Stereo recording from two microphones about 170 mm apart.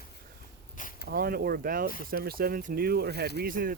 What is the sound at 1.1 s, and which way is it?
Speech, 65° right (ahead or behind).